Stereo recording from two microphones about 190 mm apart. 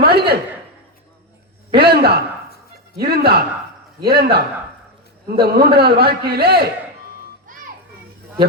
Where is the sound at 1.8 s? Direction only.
55° right (ahead or behind).